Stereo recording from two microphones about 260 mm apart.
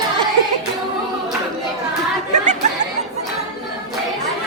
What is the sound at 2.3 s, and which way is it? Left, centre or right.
Chatter, right.